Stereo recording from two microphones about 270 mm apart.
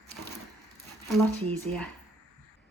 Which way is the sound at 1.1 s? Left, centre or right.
Centre.